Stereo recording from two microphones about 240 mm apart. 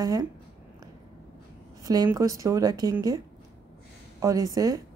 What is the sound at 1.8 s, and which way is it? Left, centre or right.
A woman's voice, centre.